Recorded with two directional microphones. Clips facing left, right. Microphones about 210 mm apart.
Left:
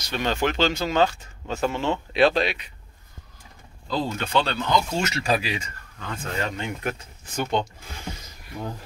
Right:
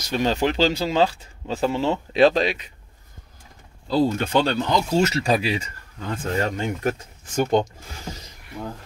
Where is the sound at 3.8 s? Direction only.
40° right (ahead or behind).